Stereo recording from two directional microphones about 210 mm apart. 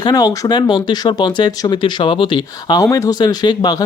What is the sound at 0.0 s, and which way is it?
Speech, 20° left (ahead or behind).